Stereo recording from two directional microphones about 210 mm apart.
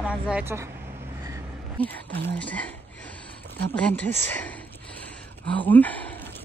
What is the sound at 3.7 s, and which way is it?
Speech, 5° left (ahead or behind).